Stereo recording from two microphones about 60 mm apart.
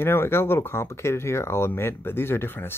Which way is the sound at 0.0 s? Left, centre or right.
Left.